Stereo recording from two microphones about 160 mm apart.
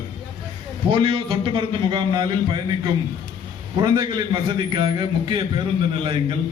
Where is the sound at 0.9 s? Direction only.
35° right (ahead or behind).